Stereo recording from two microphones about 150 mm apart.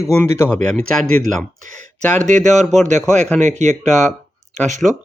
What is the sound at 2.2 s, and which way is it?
Speech, 55° right (ahead or behind).